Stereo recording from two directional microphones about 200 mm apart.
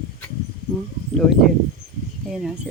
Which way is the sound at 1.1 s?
Centre (ahead or behind).